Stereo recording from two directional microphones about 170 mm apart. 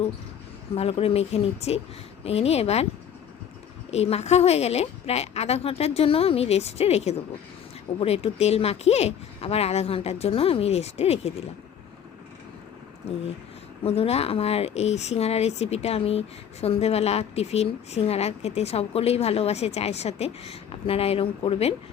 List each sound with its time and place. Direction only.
0.8 s speech: 35° left (ahead or behind)
3.9 s speech: 40° left (ahead or behind)
13.8 s speech: 35° left (ahead or behind)